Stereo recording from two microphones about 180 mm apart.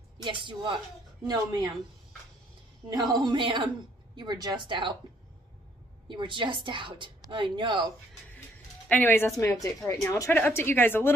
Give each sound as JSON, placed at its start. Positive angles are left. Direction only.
{"t": 0.2, "sound": "a woman's voice", "side_deg": -25}
{"t": 2.9, "sound": "a woman's voice", "side_deg": -20}
{"t": 6.0, "sound": "a woman's voice", "side_deg": -25}
{"t": 8.8, "sound": "speech", "side_deg": 10}